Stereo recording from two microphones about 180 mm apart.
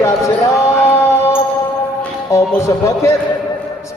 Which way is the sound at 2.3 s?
15° left (ahead or behind).